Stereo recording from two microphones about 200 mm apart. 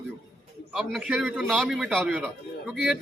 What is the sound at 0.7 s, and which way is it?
A man's voice, centre (ahead or behind).